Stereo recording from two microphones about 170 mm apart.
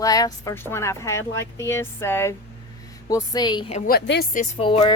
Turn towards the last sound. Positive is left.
turn(degrees=35)  # may be behind; listen again after turning